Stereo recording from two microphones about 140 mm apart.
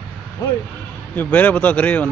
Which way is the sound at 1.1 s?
15° left (ahead or behind).